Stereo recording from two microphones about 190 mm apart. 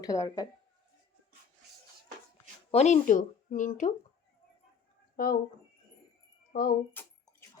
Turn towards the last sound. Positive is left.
turn(degrees=50)  # may be behind; listen again after turning